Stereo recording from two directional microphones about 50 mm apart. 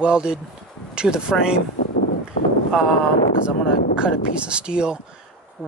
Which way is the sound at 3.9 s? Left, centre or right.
Centre.